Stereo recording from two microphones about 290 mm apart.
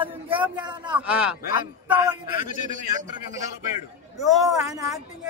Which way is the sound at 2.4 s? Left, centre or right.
Left.